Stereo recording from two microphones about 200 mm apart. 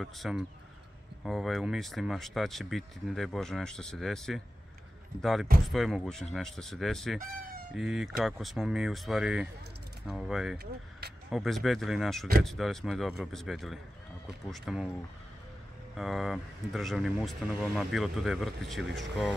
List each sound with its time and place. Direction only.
0.0 s speech: centre (ahead or behind)
10.6 s vehicle: 55° right (ahead or behind)
11.2 s speech: centre (ahead or behind)
16.0 s speech: centre (ahead or behind)